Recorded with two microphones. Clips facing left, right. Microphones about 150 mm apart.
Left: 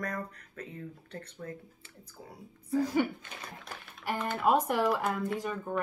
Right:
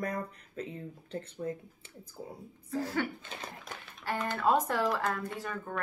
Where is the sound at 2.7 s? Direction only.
15° left (ahead or behind).